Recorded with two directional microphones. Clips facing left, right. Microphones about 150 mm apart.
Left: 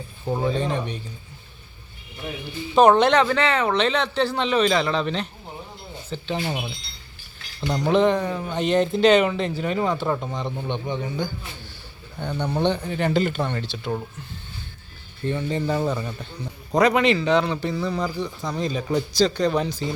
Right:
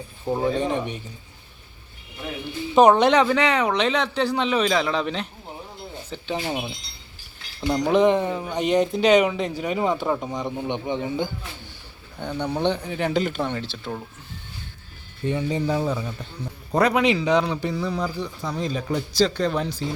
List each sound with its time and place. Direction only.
0.3 s speech: 5° right (ahead or behind)
0.5 s speech: 20° right (ahead or behind)
2.7 s speech: 10° right (ahead or behind)
6.4 s speech: centre (ahead or behind)
7.7 s speech: 5° right (ahead or behind)
8.0 s speech: 20° right (ahead or behind)
12.2 s speech: 10° right (ahead or behind)
15.3 s speech: 10° right (ahead or behind)